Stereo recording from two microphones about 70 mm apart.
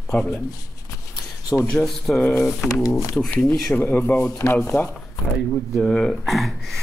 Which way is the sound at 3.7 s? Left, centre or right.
Left.